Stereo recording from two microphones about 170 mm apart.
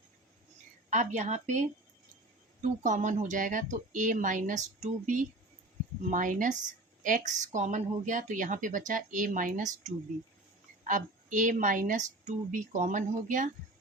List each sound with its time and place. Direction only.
0.9 s speech: 45° right (ahead or behind)